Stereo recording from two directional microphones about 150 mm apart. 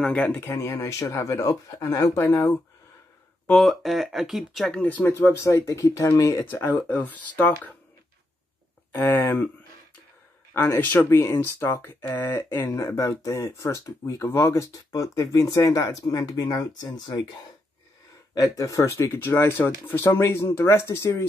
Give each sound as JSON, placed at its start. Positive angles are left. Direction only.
{"t": 0.0, "sound": "speech", "side_deg": 10}
{"t": 3.4, "sound": "speech", "side_deg": 0}
{"t": 8.9, "sound": "speech", "side_deg": 15}
{"t": 10.5, "sound": "speech", "side_deg": 15}
{"t": 18.3, "sound": "speech", "side_deg": 20}